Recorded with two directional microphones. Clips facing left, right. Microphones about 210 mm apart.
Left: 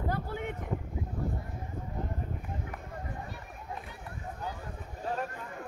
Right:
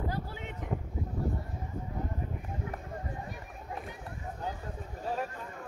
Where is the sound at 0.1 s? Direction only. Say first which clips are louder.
Left 4 dB; 55° left (ahead or behind).